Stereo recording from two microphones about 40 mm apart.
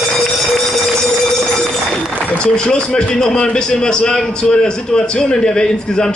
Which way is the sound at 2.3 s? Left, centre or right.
Left.